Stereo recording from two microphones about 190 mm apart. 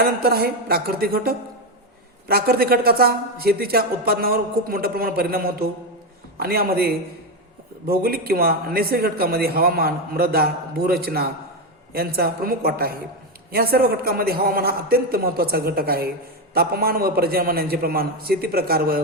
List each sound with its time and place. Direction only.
0.0 s speech: 55° right (ahead or behind)